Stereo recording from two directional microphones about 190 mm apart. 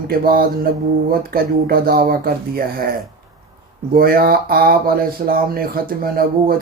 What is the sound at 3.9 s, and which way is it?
Speech, 50° right (ahead or behind).